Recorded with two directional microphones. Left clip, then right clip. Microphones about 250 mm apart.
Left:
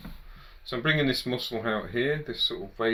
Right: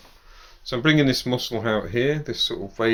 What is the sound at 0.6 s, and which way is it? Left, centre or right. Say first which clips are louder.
Speech: right 6 dB; right.